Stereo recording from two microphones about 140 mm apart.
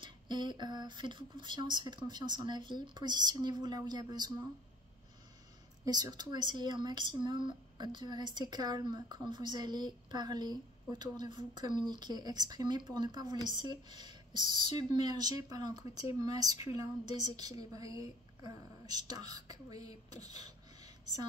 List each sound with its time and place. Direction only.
0.0 s speech: 35° right (ahead or behind)
5.9 s speech: 30° right (ahead or behind)
14.7 s speech: 50° left (ahead or behind)
15.0 s speech: 30° right (ahead or behind)